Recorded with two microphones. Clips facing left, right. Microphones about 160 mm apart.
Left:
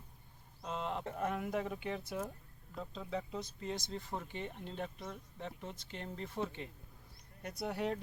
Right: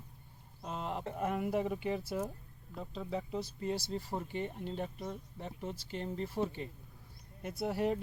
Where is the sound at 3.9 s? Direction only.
35° right (ahead or behind).